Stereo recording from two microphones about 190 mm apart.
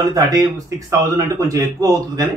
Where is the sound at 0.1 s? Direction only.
20° right (ahead or behind).